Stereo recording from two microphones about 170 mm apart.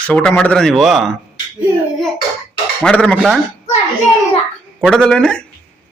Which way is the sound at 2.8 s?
5° left (ahead or behind).